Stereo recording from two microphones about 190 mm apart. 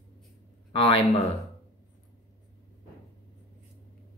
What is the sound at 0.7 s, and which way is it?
Speech, 25° left (ahead or behind).